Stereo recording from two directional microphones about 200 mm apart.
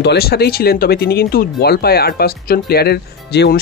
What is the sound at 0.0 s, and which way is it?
Speech, 55° left (ahead or behind).